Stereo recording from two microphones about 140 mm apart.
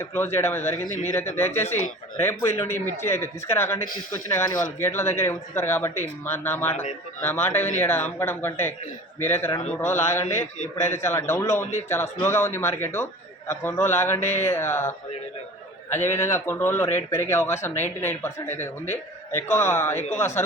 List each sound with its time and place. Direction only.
0.0 s a man's voice: 15° left (ahead or behind)